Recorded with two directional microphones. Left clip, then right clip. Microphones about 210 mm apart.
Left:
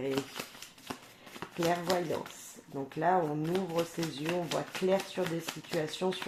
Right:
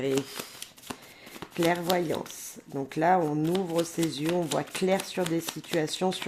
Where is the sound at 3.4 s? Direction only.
30° right (ahead or behind).